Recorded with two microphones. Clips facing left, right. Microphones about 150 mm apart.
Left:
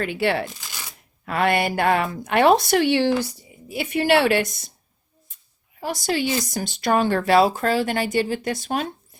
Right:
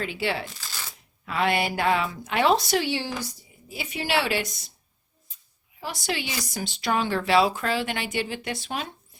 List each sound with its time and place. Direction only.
0.0 s a woman's voice: 60° left (ahead or behind)
0.6 s a sound: 15° left (ahead or behind)
1.2 s a woman's voice: 55° left (ahead or behind)
5.8 s speech: 40° left (ahead or behind)